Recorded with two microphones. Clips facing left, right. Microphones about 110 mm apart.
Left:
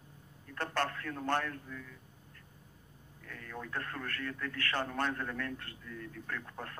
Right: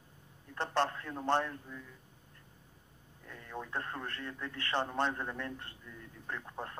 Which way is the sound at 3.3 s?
20° right (ahead or behind).